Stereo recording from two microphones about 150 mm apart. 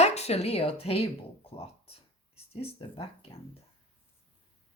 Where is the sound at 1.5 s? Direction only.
40° left (ahead or behind).